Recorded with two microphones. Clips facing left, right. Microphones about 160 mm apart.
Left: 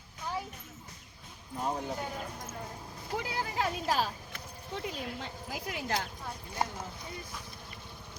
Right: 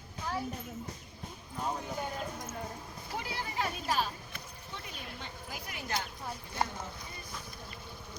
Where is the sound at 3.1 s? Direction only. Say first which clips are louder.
Left 3 dB; 90° left.